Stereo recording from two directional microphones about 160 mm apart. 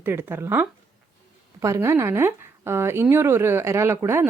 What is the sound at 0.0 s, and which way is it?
Speech, 15° right (ahead or behind).